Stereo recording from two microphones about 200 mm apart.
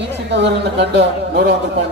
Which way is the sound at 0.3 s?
60° right (ahead or behind).